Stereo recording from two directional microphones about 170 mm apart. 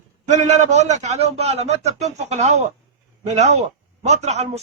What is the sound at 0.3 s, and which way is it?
A man's voice, 45° right (ahead or behind).